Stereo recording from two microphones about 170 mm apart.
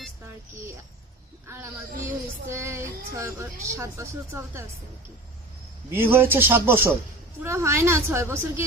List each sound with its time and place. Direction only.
1.5 s a woman's voice: 15° right (ahead or behind)
5.9 s a woman's voice: 15° right (ahead or behind)